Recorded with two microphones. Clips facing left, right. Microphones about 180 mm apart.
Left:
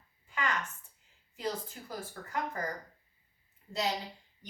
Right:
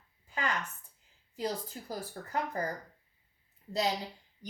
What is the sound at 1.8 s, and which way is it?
Speech, 25° right (ahead or behind).